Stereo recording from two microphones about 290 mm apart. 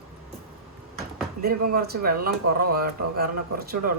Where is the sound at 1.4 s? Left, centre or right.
Right.